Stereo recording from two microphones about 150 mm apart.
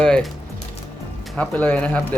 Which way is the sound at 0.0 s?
5° left (ahead or behind).